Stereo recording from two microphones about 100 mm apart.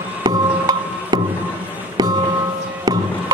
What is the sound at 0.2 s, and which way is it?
Music, 40° right (ahead or behind).